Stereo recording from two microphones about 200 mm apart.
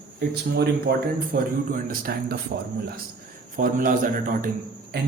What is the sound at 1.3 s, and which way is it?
Speech, 45° right (ahead or behind).